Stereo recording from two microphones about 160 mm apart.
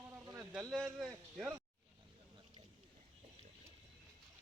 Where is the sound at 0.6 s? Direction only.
Centre (ahead or behind).